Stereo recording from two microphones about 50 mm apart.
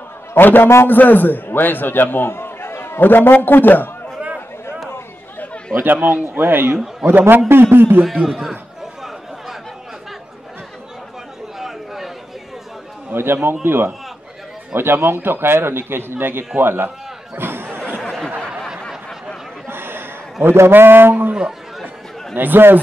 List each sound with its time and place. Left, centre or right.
0.3 s a man's voice: left
5.8 s a man's voice: right
8.0 s a man's voice: centre
11.6 s chatter: centre
13.1 s a man's voice: right
17.4 s a sound: right
19.7 s a sound: right
20.5 s a man's voice: right
21.8 s chatter: right